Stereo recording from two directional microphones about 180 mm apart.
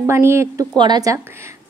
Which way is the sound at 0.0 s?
15° right (ahead or behind).